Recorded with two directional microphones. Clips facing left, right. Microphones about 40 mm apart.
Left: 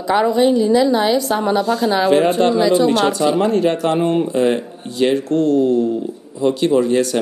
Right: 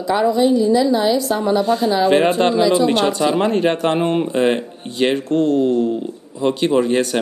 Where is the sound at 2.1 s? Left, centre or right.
Right.